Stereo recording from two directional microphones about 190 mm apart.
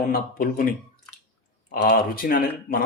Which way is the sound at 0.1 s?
50° left (ahead or behind).